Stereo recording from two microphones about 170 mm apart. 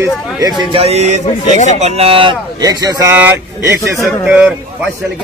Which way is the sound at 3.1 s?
10° right (ahead or behind).